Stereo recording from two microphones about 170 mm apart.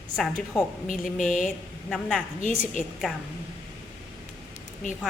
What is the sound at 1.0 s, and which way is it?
Speech, 50° left (ahead or behind).